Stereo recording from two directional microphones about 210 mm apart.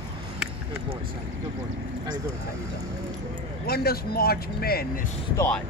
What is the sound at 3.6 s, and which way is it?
Speech, 45° left (ahead or behind).